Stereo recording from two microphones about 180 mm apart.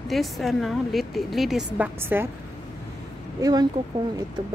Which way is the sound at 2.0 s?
10° right (ahead or behind).